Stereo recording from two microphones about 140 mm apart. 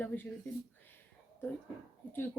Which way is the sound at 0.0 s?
15° left (ahead or behind).